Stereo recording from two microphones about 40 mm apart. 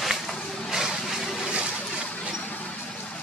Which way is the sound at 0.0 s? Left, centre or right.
Centre.